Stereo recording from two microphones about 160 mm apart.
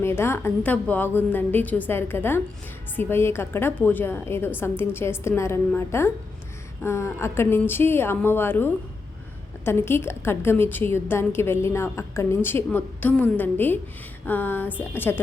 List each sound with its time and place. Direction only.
0.0 s a woman's voice: 15° left (ahead or behind)